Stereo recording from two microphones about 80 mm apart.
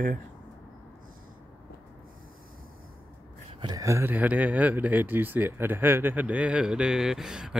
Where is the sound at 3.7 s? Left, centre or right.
Right.